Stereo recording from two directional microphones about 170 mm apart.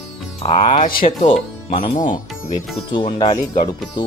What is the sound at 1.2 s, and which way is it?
Speech, 30° left (ahead or behind).